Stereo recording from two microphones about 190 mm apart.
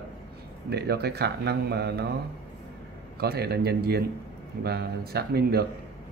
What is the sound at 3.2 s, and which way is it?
Speech, 55° right (ahead or behind).